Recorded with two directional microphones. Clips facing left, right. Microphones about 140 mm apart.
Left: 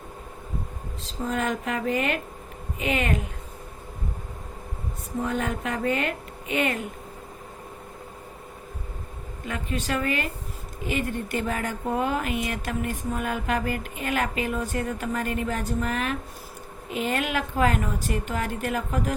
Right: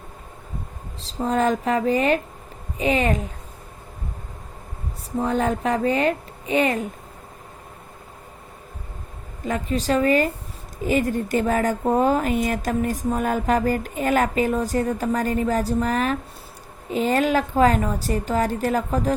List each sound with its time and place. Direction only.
1.0 s speech: 35° right (ahead or behind)
5.2 s speech: 35° right (ahead or behind)
9.5 s speech: 35° right (ahead or behind)